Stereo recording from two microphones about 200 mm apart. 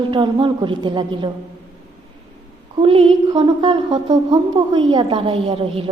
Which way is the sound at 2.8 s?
25° right (ahead or behind).